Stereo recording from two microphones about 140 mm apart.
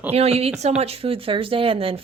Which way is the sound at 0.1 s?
45° right (ahead or behind).